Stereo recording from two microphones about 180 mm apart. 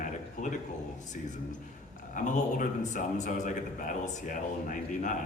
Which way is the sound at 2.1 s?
45° left (ahead or behind).